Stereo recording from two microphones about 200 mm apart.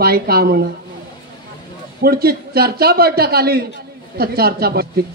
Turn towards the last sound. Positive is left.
turn(degrees=-50)  # may be behind; listen again after turning